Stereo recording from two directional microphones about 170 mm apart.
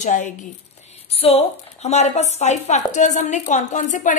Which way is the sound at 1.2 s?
40° left (ahead or behind).